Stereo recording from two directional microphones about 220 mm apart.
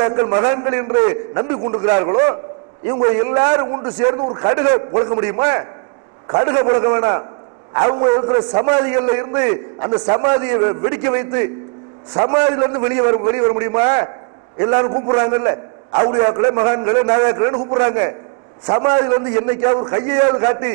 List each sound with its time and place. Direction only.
0.0 s a man's voice: 20° right (ahead or behind)
7.8 s a man's voice: 30° right (ahead or behind)